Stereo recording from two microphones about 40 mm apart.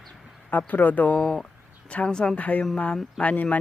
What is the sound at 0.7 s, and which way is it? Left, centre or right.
Speech, left.